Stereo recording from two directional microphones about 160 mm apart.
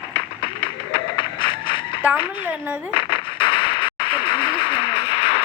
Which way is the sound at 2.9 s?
35° left (ahead or behind).